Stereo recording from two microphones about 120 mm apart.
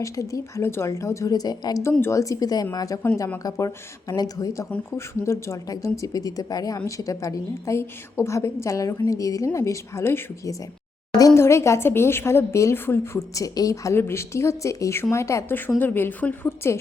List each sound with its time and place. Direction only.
0.0 s speech: 25° left (ahead or behind)
1.8 s a woman's voice: 20° left (ahead or behind)